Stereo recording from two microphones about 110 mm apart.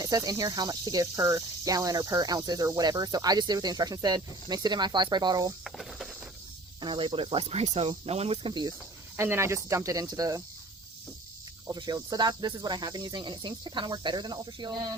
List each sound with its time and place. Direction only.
0.0 s speech: 35° right (ahead or behind)
5.6 s a sound: centre (ahead or behind)
6.8 s speech: 50° right (ahead or behind); by 7.9 s 80° right
7.9 s speech: 70° right (ahead or behind)
8.4 s speech: 45° right (ahead or behind)
9.1 s speech: 20° right (ahead or behind)
11.7 s speech: 40° right (ahead or behind)